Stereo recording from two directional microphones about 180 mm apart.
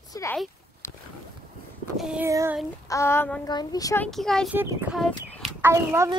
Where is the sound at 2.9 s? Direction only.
15° left (ahead or behind).